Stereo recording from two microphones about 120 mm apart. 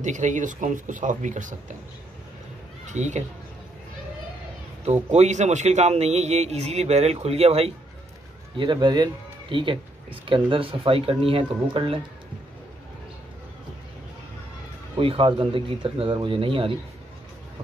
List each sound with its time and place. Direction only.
0.0 s speech: 90° right
2.9 s speech: 80° right
5.1 s a man's voice: 70° right (ahead or behind)
8.5 s speech: 40° right (ahead or behind)
15.0 s speech: 45° right (ahead or behind)